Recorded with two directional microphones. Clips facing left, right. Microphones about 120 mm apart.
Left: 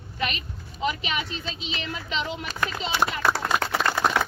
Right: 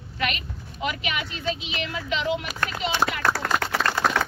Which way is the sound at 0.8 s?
30° left (ahead or behind).